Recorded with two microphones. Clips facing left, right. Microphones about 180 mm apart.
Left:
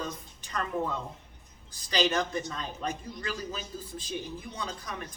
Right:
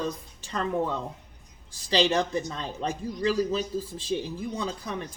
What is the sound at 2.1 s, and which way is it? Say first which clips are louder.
A man's voice: right 4 dB; 30° right (ahead or behind).